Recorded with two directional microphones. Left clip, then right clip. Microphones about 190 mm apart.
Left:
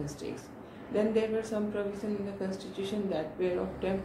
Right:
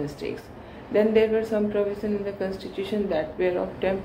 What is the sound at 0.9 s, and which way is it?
A woman's voice, 15° right (ahead or behind).